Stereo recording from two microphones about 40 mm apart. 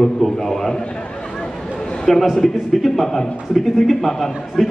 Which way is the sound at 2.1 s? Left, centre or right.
Centre.